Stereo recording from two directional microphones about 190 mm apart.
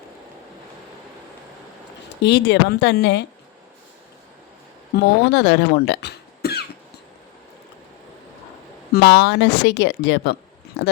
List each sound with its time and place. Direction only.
2.2 s speech: 65° left (ahead or behind)
4.9 s speech: 60° left (ahead or behind)
8.9 s speech: 65° left (ahead or behind)